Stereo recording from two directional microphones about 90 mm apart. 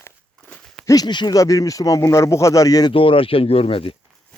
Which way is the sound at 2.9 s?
85° left.